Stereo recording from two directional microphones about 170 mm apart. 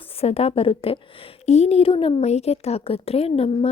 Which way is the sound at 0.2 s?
35° left (ahead or behind).